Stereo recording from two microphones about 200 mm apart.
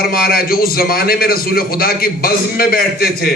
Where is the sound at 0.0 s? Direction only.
50° left (ahead or behind).